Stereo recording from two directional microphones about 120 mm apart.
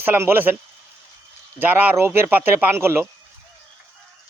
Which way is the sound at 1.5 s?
15° right (ahead or behind).